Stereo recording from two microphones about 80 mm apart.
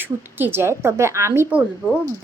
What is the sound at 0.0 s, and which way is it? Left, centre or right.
A woman's voice, right.